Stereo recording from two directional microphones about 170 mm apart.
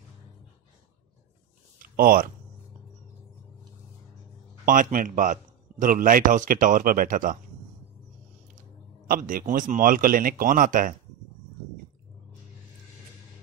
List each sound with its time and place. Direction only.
1.8 s a sound: 55° right (ahead or behind)
4.6 s a man's voice: 55° right (ahead or behind)
9.0 s a man's voice: 55° right (ahead or behind)